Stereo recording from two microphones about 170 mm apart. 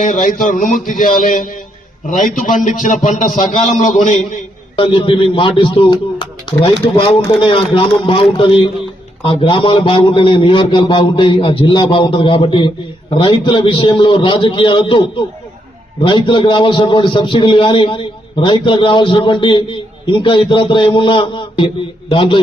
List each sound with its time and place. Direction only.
0.0 s a man's voice: 50° left (ahead or behind)
4.8 s a man's voice: 30° left (ahead or behind)
16.0 s a man's voice: 30° left (ahead or behind)